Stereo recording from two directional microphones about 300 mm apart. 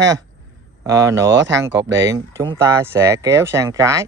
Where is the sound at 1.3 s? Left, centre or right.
Right.